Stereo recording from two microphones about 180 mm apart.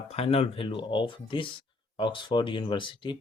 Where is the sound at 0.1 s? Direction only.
35° left (ahead or behind).